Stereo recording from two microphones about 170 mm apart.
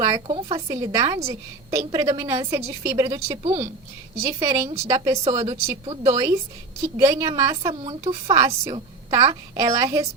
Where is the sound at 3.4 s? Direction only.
40° right (ahead or behind).